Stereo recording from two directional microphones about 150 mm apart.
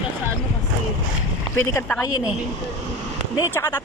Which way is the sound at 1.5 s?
15° left (ahead or behind).